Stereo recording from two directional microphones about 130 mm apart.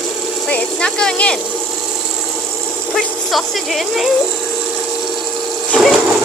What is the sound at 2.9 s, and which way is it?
Speech, centre (ahead or behind).